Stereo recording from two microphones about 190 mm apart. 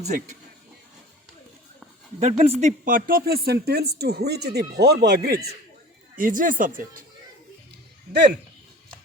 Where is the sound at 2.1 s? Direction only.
35° right (ahead or behind); by 5.4 s 55° right (ahead or behind).